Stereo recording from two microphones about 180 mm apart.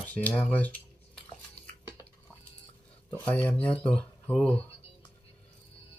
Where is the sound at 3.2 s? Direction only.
10° left (ahead or behind).